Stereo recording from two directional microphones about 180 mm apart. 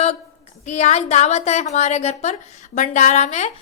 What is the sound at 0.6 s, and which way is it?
A woman's voice, 40° left (ahead or behind).